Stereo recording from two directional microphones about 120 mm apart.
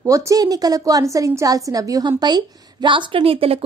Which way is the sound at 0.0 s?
30° right (ahead or behind).